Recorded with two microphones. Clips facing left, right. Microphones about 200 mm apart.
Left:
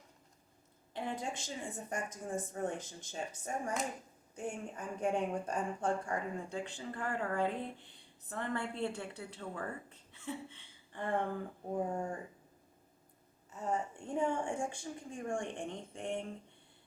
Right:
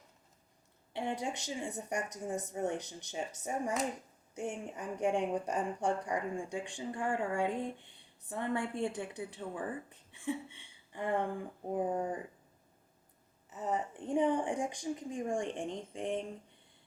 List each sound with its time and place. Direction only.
1.2 s a woman's voice: 15° right (ahead or behind)
13.5 s speech: 20° right (ahead or behind)